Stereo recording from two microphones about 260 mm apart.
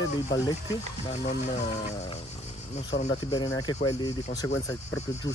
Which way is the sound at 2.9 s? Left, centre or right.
Centre.